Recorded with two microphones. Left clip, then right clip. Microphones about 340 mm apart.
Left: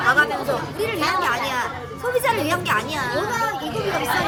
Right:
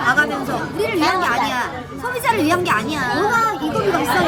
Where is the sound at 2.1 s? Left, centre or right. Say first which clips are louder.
Right 3 dB; centre.